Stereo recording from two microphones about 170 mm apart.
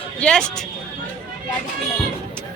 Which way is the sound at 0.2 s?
5° left (ahead or behind).